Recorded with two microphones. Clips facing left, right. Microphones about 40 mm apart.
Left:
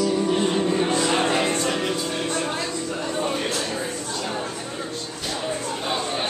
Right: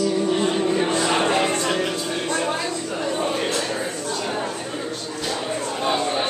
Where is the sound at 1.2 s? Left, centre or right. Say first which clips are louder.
Right 2 dB; centre.